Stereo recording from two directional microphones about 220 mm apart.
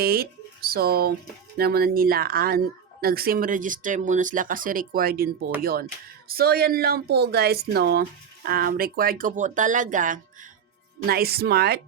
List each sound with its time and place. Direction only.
0.0 s a woman's voice: 45° right (ahead or behind)